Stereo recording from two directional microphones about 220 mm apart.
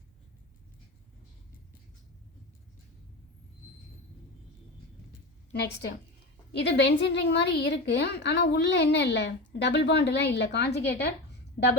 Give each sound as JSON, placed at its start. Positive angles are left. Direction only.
{"t": 6.5, "sound": "a woman's voice", "side_deg": 50}